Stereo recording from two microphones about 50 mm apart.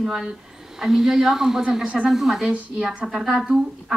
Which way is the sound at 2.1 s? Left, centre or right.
Centre.